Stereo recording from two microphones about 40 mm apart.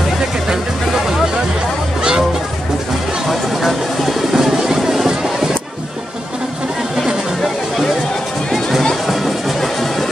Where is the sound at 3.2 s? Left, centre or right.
Centre.